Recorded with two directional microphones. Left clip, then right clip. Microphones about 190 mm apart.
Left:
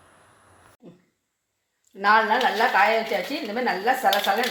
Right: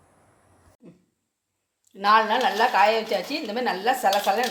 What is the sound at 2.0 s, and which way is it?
Speech, 25° right (ahead or behind).